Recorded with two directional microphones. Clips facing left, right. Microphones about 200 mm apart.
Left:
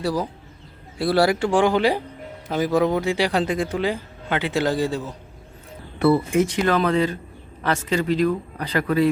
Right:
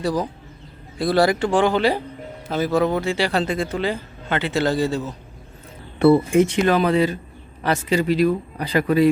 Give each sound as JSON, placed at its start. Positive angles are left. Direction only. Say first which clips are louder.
{"t": 0.0, "sound": "a man's voice", "louder": "right 1 dB", "side_deg": 5}
{"t": 6.0, "sound": "speech", "louder": "right 4 dB", "side_deg": -30}
{"t": 6.7, "sound": "a man's voice", "louder": "right 2 dB", "side_deg": -10}